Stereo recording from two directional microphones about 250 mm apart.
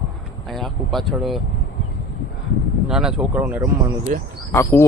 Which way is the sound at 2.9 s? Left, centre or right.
Centre.